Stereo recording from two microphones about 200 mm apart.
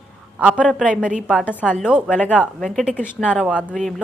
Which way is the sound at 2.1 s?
5° left (ahead or behind).